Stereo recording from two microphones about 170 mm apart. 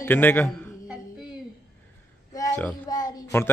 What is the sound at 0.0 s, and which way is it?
Speech, 10° left (ahead or behind).